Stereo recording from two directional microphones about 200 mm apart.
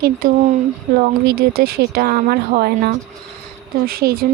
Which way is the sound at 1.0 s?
50° right (ahead or behind).